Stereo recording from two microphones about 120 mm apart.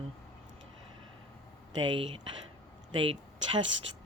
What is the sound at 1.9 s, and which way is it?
Speech, 45° right (ahead or behind).